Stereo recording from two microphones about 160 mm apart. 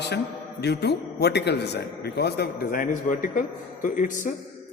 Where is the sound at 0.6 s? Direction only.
90° left.